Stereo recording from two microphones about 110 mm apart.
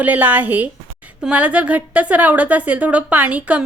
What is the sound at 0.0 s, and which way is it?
A woman's voice, 15° right (ahead or behind).